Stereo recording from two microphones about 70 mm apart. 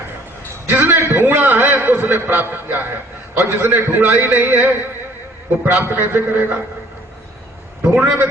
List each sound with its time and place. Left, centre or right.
0.7 s a man's voice: right
7.9 s a man's voice: centre